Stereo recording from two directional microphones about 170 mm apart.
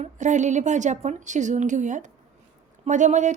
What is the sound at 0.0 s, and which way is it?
A woman's voice, 45° right (ahead or behind).